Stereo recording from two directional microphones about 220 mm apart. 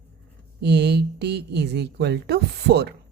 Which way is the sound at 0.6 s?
50° right (ahead or behind).